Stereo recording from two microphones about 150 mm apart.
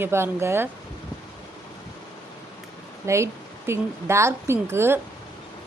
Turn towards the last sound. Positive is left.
turn(degrees=-15)  # may be behind; listen again after turning